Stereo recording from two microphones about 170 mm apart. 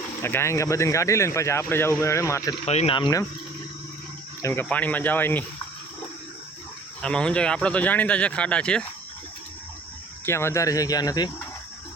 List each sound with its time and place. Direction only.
0.2 s speech: 15° left (ahead or behind)
2.6 s speech: 35° left (ahead or behind)
4.4 s speech: 10° left (ahead or behind)
7.0 s speech: 5° left (ahead or behind)
10.2 s speech: 15° left (ahead or behind)